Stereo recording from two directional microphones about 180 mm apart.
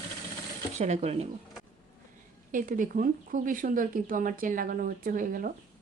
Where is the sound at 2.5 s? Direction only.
45° right (ahead or behind).